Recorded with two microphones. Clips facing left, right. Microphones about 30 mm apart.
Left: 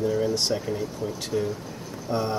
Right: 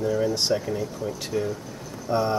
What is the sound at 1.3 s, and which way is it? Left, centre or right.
Speech, centre.